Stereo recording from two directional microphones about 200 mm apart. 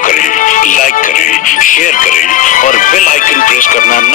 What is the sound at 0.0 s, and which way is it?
Music, 40° left (ahead or behind).